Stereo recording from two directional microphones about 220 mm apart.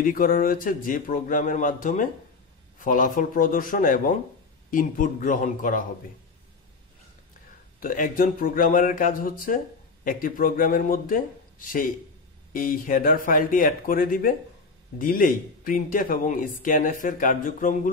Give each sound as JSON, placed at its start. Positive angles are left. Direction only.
{"t": 0.0, "sound": "speech", "side_deg": 40}
{"t": 7.8, "sound": "speech", "side_deg": 40}